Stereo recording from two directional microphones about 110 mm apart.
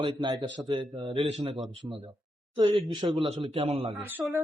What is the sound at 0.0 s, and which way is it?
A man's voice, 45° right (ahead or behind).